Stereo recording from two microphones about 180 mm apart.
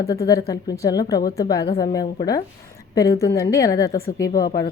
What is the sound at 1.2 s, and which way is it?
Speech, 60° left (ahead or behind).